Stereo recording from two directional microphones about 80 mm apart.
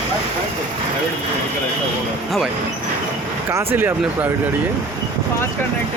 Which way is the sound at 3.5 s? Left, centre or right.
Right.